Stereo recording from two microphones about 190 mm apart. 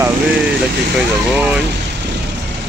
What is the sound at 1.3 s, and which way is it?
Speech, 5° right (ahead or behind).